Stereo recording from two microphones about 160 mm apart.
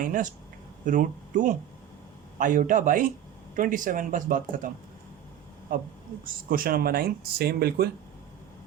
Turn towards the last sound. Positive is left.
turn(degrees=-75)  # may be behind; listen again after turning